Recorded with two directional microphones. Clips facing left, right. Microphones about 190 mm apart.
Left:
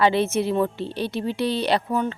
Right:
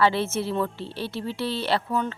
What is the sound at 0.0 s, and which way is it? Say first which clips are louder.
Speech: left 3 dB; 20° left (ahead or behind).